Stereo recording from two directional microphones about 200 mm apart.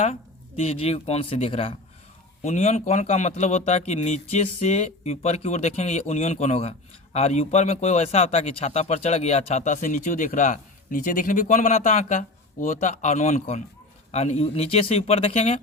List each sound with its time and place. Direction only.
0.0 s a man's voice: 30° left (ahead or behind)